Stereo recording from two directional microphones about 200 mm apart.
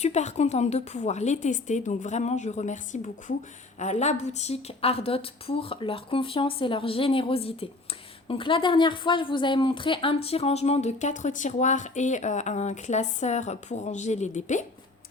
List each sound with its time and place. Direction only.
0.0 s a woman's voice: 35° left (ahead or behind)